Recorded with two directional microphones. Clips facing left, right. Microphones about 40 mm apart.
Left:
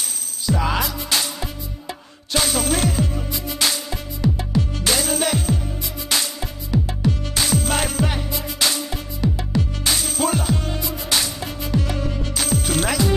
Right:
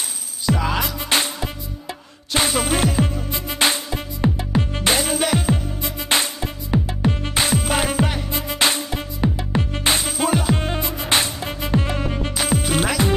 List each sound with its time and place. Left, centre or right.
0.5 s music: right
2.3 s music: right
3.3 s music: right
7.6 s music: centre
8.3 s music: right
10.0 s music: centre
10.5 s music: right
12.4 s music: centre